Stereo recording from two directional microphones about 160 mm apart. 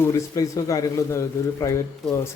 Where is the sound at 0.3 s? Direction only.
20° left (ahead or behind).